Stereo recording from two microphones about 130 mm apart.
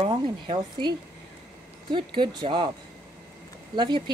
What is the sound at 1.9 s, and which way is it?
Speech, 40° right (ahead or behind).